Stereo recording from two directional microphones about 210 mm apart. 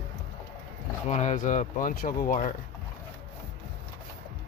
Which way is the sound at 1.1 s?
35° left (ahead or behind).